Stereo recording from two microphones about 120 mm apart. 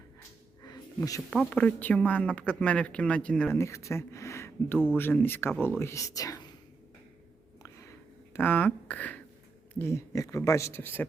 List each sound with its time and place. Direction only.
0.6 s a sound: 30° left (ahead or behind)
1.3 s speech: 10° left (ahead or behind)
3.5 s speech: 25° left (ahead or behind)
8.3 s speech: 15° left (ahead or behind)